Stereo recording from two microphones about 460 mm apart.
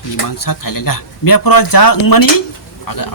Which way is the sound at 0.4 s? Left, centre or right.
Left.